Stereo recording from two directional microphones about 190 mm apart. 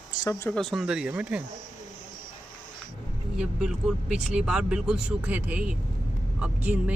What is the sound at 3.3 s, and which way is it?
Speech, 5° right (ahead or behind).